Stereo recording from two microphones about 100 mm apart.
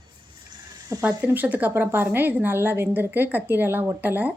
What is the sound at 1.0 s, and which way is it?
A woman's voice, 15° right (ahead or behind).